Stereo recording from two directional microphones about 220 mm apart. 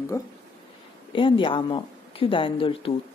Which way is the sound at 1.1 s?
25° left (ahead or behind).